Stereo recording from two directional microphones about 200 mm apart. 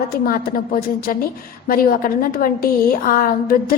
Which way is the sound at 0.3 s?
45° left (ahead or behind).